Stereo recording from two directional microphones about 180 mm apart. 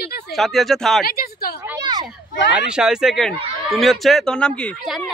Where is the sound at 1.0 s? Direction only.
55° left (ahead or behind).